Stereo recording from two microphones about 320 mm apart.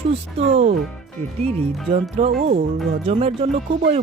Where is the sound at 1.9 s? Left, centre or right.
Centre.